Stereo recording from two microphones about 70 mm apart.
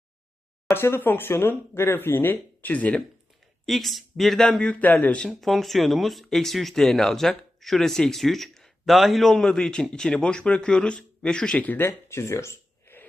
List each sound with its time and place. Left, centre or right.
0.7 s speech: left
3.7 s speech: centre
4.6 s speech: left
5.3 s speech: centre
11.6 s speech: left
11.9 s speech: left
12.8 s a sound: left